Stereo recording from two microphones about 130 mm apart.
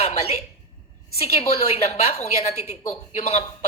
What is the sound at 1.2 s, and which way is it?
A woman's voice, 55° left (ahead or behind).